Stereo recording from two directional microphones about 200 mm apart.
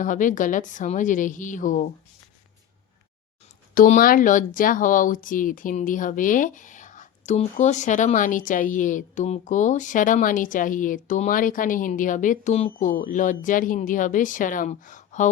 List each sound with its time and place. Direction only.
0.0 s speech: 40° left (ahead or behind)
3.8 s speech: 40° left (ahead or behind)